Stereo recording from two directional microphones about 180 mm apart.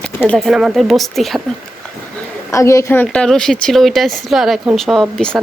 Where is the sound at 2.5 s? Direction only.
15° left (ahead or behind).